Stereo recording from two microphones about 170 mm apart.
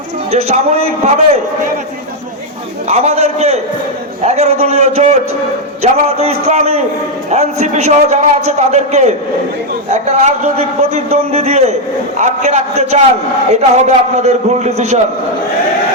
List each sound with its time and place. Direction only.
0.3 s a man's voice: 40° right (ahead or behind)
2.8 s a man's voice: 40° right (ahead or behind)